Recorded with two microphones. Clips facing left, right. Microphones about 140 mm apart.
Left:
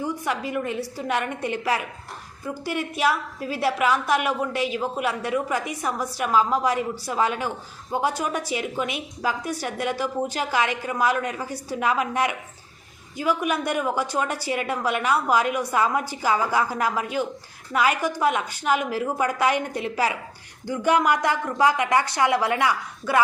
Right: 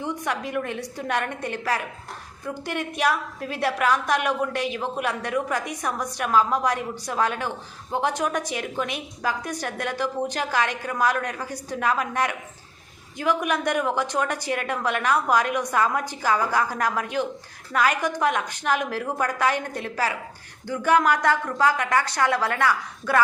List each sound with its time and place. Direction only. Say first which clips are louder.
0.0 s a woman's voice: left 1 dB; 5° left (ahead or behind)